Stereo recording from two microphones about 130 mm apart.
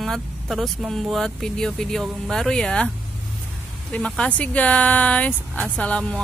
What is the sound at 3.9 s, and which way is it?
Speech, 10° left (ahead or behind).